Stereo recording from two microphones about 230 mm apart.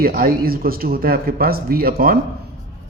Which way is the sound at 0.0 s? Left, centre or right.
Right.